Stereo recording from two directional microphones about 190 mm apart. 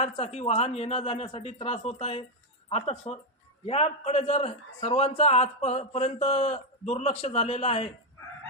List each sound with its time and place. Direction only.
0.0 s a man's voice: 35° left (ahead or behind)